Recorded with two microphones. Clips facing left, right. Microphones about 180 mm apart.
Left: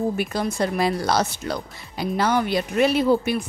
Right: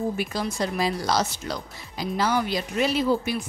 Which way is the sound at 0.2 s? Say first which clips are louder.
Left 4 dB; 55° left (ahead or behind).